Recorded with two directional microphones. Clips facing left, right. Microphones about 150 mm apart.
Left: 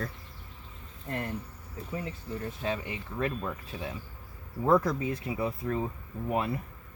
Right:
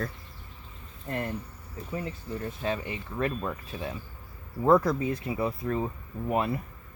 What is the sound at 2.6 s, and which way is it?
Speech, 50° right (ahead or behind).